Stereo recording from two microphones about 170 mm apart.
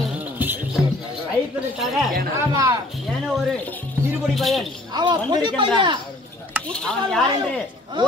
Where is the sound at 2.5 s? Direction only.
20° right (ahead or behind).